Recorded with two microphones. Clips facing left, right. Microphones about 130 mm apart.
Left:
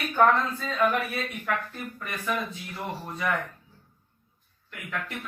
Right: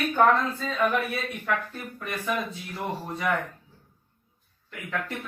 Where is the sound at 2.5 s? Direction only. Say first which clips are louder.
Right 2 dB; 25° right (ahead or behind).